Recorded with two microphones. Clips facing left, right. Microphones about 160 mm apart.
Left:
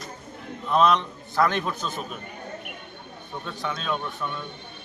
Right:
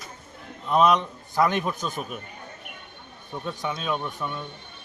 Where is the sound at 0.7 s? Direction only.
15° right (ahead or behind).